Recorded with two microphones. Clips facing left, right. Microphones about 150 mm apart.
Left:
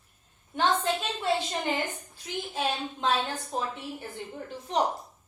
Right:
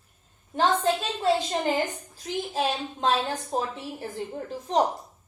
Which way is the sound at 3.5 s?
40° right (ahead or behind).